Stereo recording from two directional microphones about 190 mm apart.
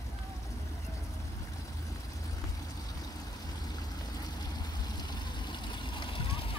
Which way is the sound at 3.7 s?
20° left (ahead or behind).